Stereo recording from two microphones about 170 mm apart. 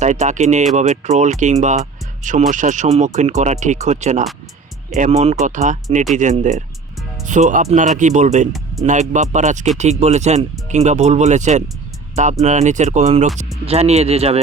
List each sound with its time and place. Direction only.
0.0 s speech: 45° right (ahead or behind)